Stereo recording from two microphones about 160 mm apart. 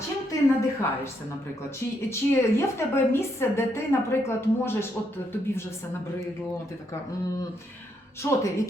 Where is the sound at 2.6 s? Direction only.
15° left (ahead or behind).